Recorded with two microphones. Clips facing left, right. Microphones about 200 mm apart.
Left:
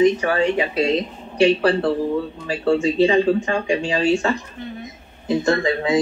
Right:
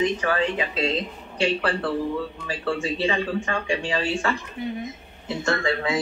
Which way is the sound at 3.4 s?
25° left (ahead or behind).